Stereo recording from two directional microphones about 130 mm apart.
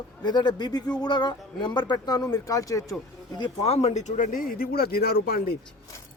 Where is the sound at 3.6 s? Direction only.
55° left (ahead or behind); by 4.6 s 90° left.